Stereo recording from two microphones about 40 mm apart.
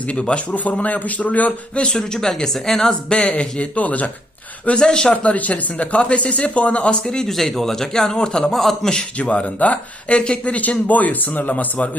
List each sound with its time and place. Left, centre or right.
0.1 s speech: left
0.5 s speech: left
2.0 s speech: centre
3.8 s speech: left
4.8 s speech: left
7.0 s speech: centre
7.3 s speech: centre
9.1 s speech: left
10.5 s speech: left